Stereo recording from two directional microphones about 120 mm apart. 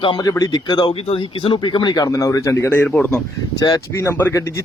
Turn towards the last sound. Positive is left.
turn(degrees=15)  # may be behind; listen again after turning